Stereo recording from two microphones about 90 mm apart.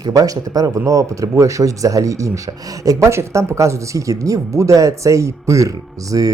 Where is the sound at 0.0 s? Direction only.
40° right (ahead or behind).